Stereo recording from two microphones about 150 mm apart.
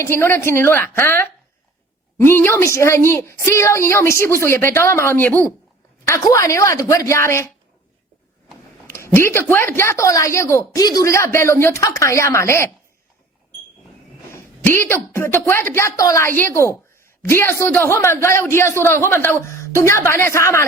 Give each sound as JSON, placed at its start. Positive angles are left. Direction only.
{"t": 0.0, "sound": "a woman's voice", "side_deg": 15}
{"t": 8.9, "sound": "a woman's voice", "side_deg": 15}
{"t": 14.3, "sound": "a woman's voice", "side_deg": 15}